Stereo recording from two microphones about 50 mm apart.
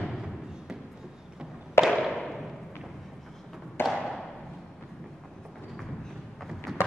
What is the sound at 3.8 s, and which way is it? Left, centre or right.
Thump, centre.